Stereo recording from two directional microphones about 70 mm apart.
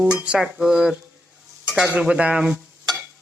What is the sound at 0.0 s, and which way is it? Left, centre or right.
Speech, centre.